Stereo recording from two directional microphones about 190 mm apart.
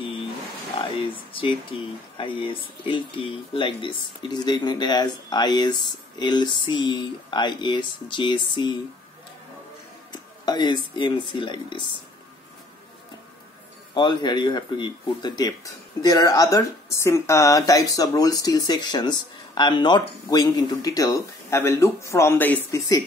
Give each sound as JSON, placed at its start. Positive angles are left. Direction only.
{"t": 0.9, "sound": "speech", "side_deg": 30}
{"t": 10.1, "sound": "speech", "side_deg": 20}
{"t": 13.9, "sound": "speech", "side_deg": 25}